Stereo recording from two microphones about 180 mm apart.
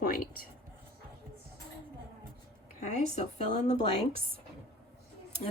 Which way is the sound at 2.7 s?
40° left (ahead or behind).